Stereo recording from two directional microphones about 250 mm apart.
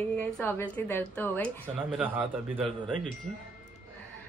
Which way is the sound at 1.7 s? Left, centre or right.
Centre.